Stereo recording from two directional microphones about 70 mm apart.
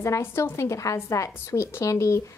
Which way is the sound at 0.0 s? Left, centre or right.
Left.